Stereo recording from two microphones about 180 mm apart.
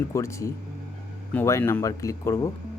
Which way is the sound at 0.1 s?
15° left (ahead or behind).